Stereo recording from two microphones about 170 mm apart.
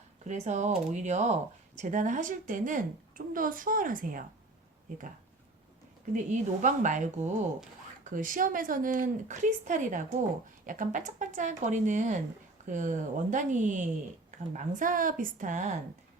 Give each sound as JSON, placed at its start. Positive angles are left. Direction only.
{"t": 0.3, "sound": "speech", "side_deg": -45}
{"t": 6.3, "sound": "speech", "side_deg": -45}
{"t": 8.1, "sound": "speech", "side_deg": -50}